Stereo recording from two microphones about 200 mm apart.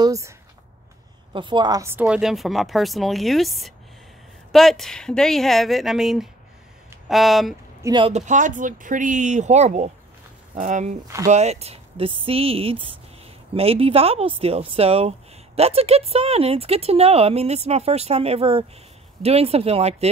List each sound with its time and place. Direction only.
0.0 s a sound: 15° right (ahead or behind)
1.3 s speech: 25° right (ahead or behind); by 7.5 s centre (ahead or behind)
7.8 s speech: 20° right (ahead or behind)
8.1 s speech: 40° right (ahead or behind)